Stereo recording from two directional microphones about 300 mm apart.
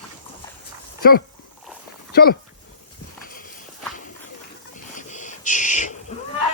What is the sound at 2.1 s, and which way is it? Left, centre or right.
Speech, left.